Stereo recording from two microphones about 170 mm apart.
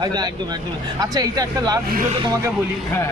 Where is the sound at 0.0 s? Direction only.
25° right (ahead or behind).